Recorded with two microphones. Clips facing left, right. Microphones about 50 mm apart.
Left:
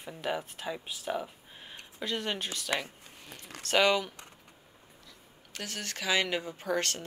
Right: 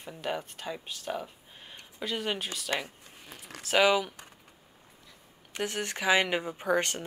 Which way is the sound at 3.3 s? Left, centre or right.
Centre.